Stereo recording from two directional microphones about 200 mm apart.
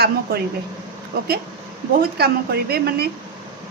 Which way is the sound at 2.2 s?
50° right (ahead or behind).